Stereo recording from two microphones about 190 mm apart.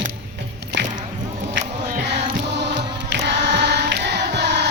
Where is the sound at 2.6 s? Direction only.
65° right (ahead or behind).